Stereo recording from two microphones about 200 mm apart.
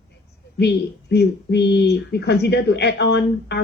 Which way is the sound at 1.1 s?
55° left (ahead or behind).